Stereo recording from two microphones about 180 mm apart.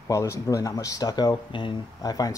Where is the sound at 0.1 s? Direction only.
15° left (ahead or behind).